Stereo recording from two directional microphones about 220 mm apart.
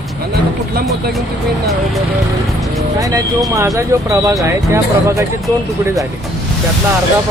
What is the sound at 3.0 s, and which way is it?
Speech, 15° right (ahead or behind).